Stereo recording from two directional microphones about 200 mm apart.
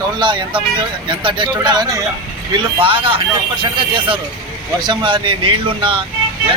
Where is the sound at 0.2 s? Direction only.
25° right (ahead or behind).